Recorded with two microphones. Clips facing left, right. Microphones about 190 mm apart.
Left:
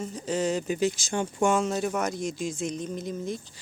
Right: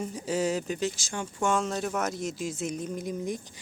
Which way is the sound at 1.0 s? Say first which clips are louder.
Left 5 dB; 20° left (ahead or behind).